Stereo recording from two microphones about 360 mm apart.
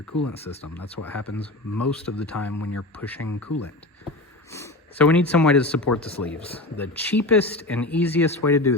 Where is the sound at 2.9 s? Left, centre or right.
Centre.